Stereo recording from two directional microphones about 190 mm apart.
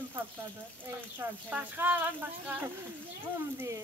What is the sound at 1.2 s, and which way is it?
Speech, 10° right (ahead or behind).